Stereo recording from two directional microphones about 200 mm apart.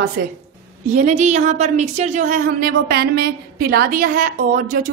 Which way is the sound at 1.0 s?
35° right (ahead or behind).